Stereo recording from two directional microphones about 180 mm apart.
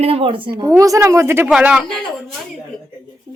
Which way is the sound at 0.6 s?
20° right (ahead or behind).